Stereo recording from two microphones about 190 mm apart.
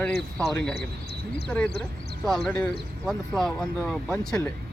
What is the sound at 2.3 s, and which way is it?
Speech, centre (ahead or behind).